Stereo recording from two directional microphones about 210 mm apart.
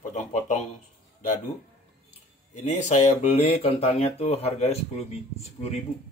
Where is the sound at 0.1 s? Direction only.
35° left (ahead or behind).